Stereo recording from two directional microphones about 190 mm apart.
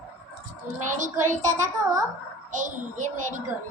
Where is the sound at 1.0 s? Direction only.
40° right (ahead or behind).